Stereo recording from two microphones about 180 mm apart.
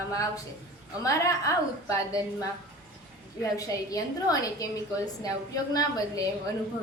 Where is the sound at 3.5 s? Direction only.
20° left (ahead or behind).